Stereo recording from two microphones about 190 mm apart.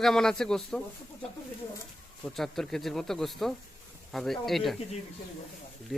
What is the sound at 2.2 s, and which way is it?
Speech, centre (ahead or behind).